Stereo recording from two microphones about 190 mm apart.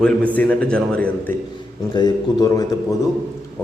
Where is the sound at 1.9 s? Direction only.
20° left (ahead or behind).